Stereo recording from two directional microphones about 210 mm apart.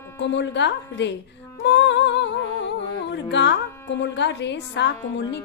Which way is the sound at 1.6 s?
55° left (ahead or behind).